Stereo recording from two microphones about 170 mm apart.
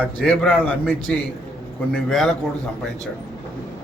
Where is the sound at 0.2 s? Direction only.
5° left (ahead or behind).